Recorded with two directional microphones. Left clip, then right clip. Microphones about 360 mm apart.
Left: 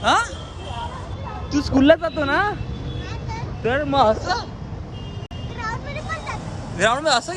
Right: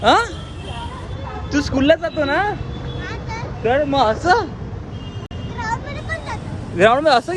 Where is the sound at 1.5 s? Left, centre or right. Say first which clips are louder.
Even; left.